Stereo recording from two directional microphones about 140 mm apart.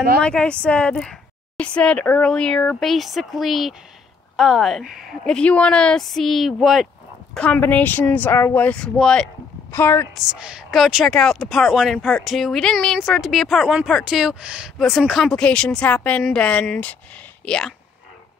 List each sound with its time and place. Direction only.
0.2 s speech: 5° left (ahead or behind)
9.7 s a woman's voice: 15° left (ahead or behind)
10.1 s speech: 5° right (ahead or behind)